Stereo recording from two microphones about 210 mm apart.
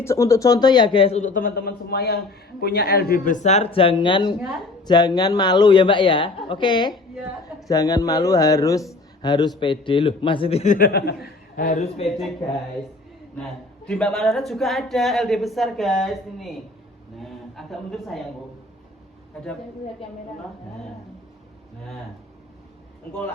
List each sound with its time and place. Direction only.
0.0 s speech: 15° left (ahead or behind)
8.9 s a sound: 20° left (ahead or behind)
9.6 s speech: 25° left (ahead or behind); by 11.1 s 45° left (ahead or behind)
11.7 s speech: 30° left (ahead or behind)
13.4 s a woman's voice: 5° left (ahead or behind)